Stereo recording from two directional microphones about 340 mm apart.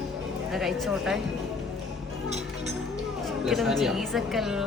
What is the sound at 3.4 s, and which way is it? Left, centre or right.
A woman's voice, centre.